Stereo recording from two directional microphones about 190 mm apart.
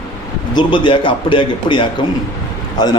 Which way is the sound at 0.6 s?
25° left (ahead or behind).